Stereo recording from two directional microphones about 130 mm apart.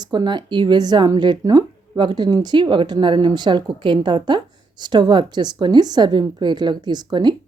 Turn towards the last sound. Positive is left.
turn(degrees=-35)  # may be behind; listen again after turning